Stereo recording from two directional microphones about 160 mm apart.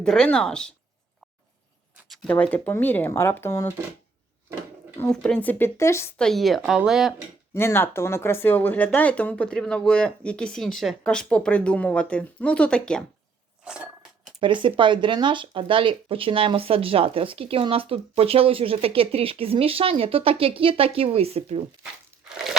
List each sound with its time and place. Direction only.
0.0 s a woman's voice: 5° left (ahead or behind)
2.0 s speech: 10° left (ahead or behind)
4.9 s speech: 10° left (ahead or behind)
6.1 s a woman's voice: centre (ahead or behind)
7.5 s speech: 15° left (ahead or behind)
13.6 s a sound: 5° right (ahead or behind)
14.4 s speech: 30° right (ahead or behind)
22.3 s a sound: 5° right (ahead or behind)